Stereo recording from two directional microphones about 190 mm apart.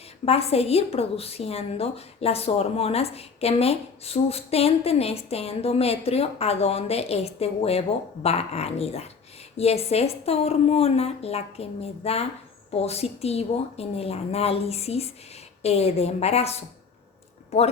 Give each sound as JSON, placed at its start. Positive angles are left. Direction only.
{"t": 0.3, "sound": "a woman's voice", "side_deg": 30}